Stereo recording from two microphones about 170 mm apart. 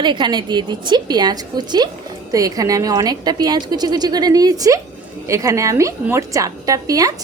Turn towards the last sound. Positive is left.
turn(degrees=-20)  # may be behind; listen again after turning